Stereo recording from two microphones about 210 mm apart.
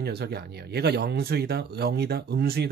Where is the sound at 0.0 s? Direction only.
50° right (ahead or behind).